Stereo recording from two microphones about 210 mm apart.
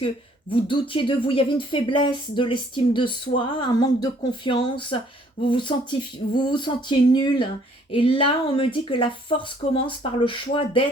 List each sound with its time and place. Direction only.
0.5 s speech: 25° left (ahead or behind)